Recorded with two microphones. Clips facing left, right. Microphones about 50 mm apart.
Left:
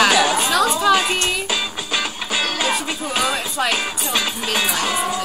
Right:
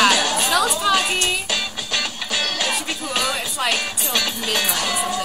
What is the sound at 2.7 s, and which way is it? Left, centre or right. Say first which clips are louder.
Speech: left 2 dB; centre.